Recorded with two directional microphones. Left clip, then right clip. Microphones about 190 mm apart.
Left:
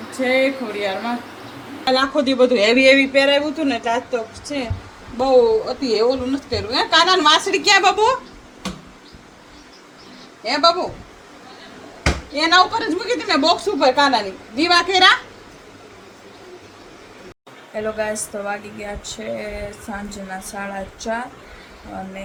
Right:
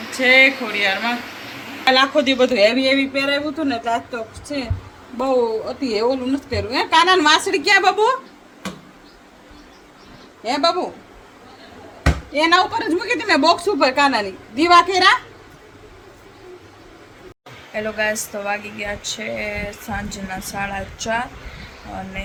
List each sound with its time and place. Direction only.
0.1 s a woman's voice: 10° left (ahead or behind); by 8.2 s 5° right (ahead or behind)
12.3 s a woman's voice: 20° right (ahead or behind)
17.7 s speech: 5° left (ahead or behind)